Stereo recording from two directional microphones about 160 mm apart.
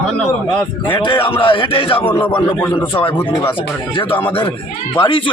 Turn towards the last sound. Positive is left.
turn(degrees=30)  # may be behind; listen again after turning